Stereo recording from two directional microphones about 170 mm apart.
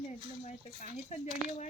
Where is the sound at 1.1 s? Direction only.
45° left (ahead or behind).